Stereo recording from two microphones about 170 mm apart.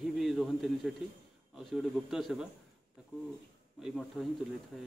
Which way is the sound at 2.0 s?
Centre (ahead or behind).